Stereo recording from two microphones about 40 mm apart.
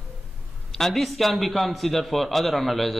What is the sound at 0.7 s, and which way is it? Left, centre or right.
Speech, centre.